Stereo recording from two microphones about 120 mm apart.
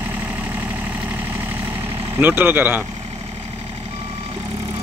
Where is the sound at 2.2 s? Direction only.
15° right (ahead or behind).